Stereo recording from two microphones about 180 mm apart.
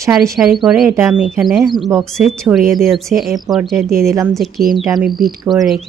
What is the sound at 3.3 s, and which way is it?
Speech, 20° right (ahead or behind).